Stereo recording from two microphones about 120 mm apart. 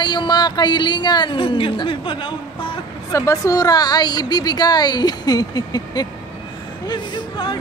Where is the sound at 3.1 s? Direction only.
25° left (ahead or behind).